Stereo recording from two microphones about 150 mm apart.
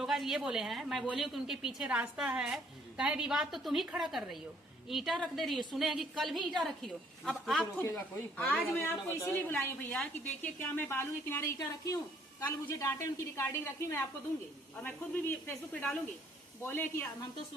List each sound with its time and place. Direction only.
0.0 s a woman's voice: centre (ahead or behind)
7.8 s a woman's voice: 15° left (ahead or behind)
13.3 s a woman's voice: 20° left (ahead or behind)